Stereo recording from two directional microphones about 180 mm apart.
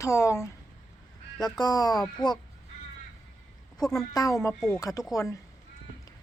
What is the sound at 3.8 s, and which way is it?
A woman's voice, 20° left (ahead or behind).